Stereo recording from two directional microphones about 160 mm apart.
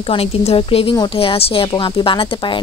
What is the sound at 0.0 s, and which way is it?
A woman's voice, 35° left (ahead or behind).